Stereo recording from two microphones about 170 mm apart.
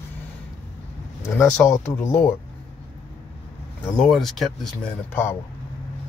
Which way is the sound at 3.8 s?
5° left (ahead or behind).